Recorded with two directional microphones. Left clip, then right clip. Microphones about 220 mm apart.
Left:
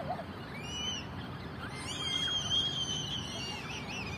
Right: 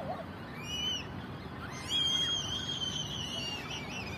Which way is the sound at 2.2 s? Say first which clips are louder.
Left 2 dB; 50° right (ahead or behind).